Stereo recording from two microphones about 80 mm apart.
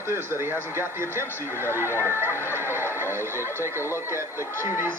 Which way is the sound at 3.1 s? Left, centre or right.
Right.